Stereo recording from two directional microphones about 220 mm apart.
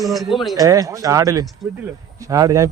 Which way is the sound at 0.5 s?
15° right (ahead or behind).